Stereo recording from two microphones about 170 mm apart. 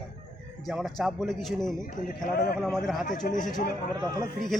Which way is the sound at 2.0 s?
60° left (ahead or behind).